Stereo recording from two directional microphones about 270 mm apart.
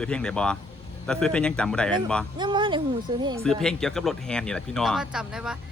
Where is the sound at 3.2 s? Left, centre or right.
Centre.